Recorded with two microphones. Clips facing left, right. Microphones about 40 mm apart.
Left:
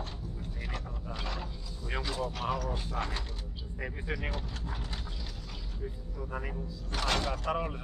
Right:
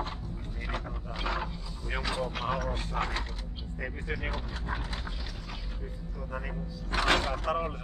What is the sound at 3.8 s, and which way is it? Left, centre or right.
Speech, centre.